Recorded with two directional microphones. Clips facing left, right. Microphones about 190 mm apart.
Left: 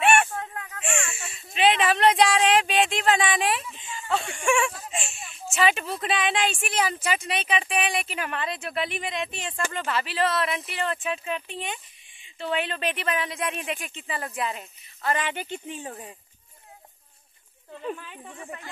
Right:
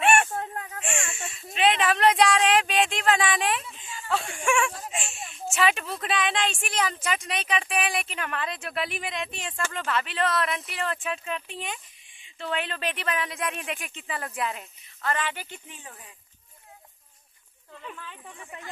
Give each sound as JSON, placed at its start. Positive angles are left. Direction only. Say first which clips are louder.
{"t": 0.6, "sound": "snake", "louder": "left 1 dB", "side_deg": -30}
{"t": 1.3, "sound": "a sound", "louder": "left 2 dB", "side_deg": 0}
{"t": 5.3, "sound": "speech", "louder": "left 1 dB", "side_deg": 0}
{"t": 15.0, "sound": "a woman's voice", "louder": "left 2 dB", "side_deg": 15}
{"t": 17.9, "sound": "speech", "louder": "left 2 dB", "side_deg": 15}